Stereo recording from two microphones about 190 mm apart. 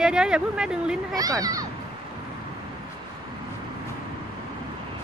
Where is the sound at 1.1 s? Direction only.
20° right (ahead or behind).